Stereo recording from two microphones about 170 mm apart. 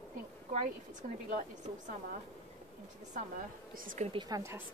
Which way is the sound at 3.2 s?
50° right (ahead or behind).